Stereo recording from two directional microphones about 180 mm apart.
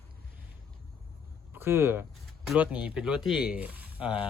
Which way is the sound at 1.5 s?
10° right (ahead or behind).